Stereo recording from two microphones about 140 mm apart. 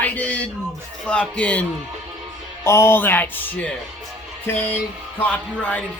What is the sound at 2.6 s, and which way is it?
Music, 20° left (ahead or behind).